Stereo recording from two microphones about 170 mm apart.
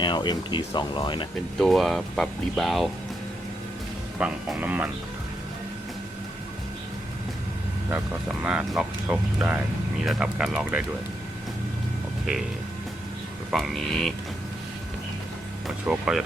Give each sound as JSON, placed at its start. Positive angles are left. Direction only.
{"t": 0.0, "sound": "speech", "side_deg": 25}
{"t": 1.5, "sound": "speech", "side_deg": 0}
{"t": 4.2, "sound": "speech", "side_deg": -5}
{"t": 8.3, "sound": "speech", "side_deg": -5}
{"t": 12.2, "sound": "speech", "side_deg": 0}
{"t": 13.5, "sound": "speech", "side_deg": 0}
{"t": 15.9, "sound": "speech", "side_deg": -5}